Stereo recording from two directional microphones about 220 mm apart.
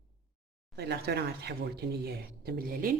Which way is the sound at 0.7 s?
50° right (ahead or behind).